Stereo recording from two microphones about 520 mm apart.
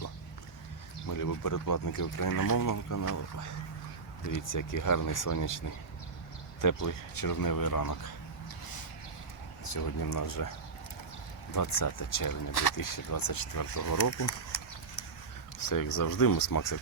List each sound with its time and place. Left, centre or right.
1.0 s speech: left
9.7 s speech: left
11.5 s speech: left
15.7 s speech: left